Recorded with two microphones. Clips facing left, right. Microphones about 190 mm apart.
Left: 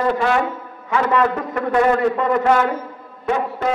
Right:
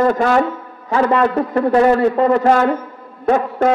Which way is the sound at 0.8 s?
35° right (ahead or behind).